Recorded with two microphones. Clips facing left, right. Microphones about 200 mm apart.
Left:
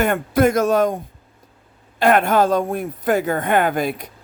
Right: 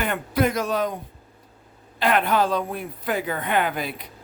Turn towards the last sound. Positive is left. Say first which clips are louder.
# left 7 dB
turn(degrees=45)  # may be behind; listen again after turning